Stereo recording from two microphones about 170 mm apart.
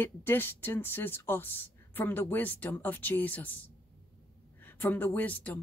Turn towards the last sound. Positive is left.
turn(degrees=10)  # may be behind; listen again after turning